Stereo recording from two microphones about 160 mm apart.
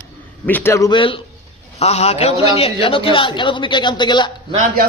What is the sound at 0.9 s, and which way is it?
A man's voice, 35° left (ahead or behind).